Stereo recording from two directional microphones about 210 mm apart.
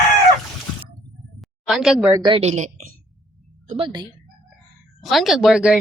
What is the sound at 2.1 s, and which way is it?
A woman's voice, 25° right (ahead or behind).